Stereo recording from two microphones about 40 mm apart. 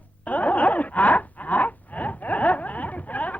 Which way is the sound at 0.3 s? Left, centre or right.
Left.